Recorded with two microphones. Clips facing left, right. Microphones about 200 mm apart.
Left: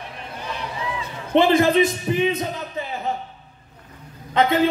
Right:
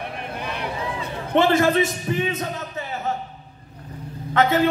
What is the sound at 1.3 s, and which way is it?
A man's voice, 15° left (ahead or behind).